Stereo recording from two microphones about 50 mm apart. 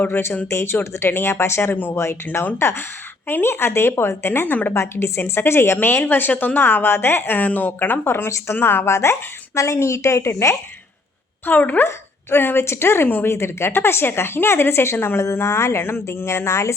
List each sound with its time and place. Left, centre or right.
0.5 s a woman's voice: left
4.7 s a woman's voice: left
8.0 s a woman's voice: left
9.6 s a woman's voice: left
11.4 s a woman's voice: left
11.9 s speech: left
12.6 s speech: left